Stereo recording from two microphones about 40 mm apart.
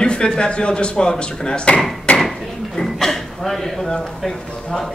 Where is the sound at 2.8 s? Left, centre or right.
Centre.